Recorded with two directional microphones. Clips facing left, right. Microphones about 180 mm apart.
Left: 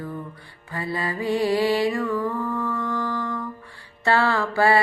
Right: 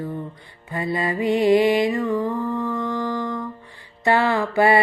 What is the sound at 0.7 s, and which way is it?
Music, 20° right (ahead or behind).